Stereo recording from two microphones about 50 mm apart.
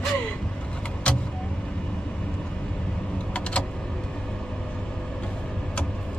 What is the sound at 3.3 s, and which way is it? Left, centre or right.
Vehicle, left.